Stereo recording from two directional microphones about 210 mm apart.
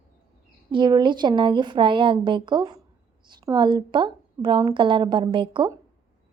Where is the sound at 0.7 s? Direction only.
20° right (ahead or behind).